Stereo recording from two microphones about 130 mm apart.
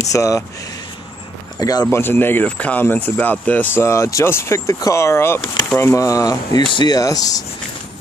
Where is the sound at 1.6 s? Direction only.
30° left (ahead or behind).